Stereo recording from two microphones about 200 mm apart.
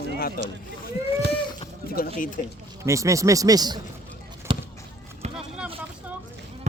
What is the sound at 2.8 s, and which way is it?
Speech, 15° right (ahead or behind).